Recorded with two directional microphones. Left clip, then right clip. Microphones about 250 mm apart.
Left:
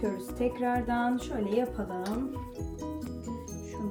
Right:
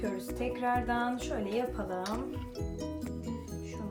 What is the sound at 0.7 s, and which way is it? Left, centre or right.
Music, centre.